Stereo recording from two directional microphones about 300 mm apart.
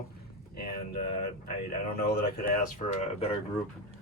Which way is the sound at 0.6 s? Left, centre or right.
Left.